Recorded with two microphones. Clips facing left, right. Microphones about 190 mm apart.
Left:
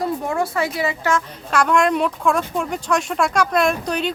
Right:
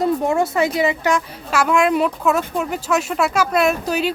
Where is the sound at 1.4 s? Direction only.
5° right (ahead or behind).